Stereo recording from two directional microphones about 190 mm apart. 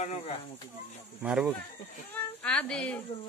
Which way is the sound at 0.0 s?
35° left (ahead or behind).